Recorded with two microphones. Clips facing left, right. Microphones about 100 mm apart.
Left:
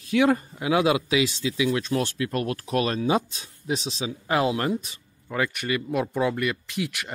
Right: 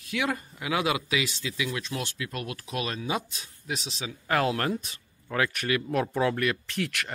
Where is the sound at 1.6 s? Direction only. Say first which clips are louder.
Left 8 dB; 35° left (ahead or behind).